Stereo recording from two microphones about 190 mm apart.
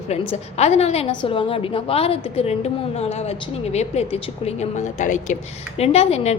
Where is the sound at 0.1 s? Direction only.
35° left (ahead or behind).